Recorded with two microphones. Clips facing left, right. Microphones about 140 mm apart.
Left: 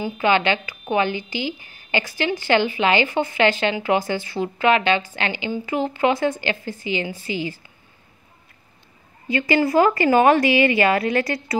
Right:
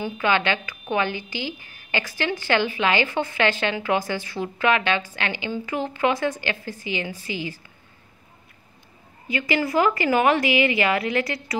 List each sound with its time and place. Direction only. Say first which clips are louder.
0.2 s a woman's voice: left 4 dB; 20° left (ahead or behind)
9.3 s a woman's voice: left 5 dB; 30° left (ahead or behind)